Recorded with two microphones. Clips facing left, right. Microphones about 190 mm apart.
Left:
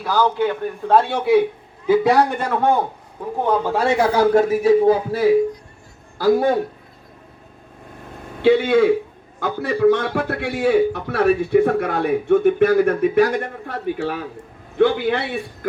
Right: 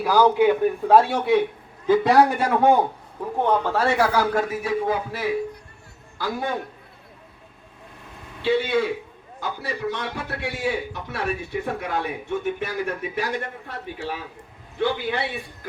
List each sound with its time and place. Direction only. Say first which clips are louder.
0.0 s a man's voice: right 2 dB; 10° right (ahead or behind)
3.3 s a man's voice: left 2 dB; 10° left (ahead or behind); by 6.6 s 35° left (ahead or behind)
8.4 s a man's voice: left 7 dB; 50° left (ahead or behind)